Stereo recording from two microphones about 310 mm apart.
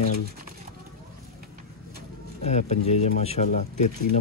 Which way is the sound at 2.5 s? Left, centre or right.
Left.